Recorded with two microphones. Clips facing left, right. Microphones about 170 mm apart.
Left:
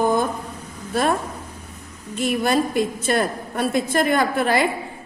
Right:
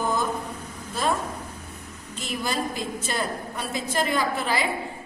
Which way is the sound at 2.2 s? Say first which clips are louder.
Left 9 dB; 60° left (ahead or behind).